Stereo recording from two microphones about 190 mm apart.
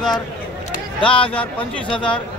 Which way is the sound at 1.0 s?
25° left (ahead or behind).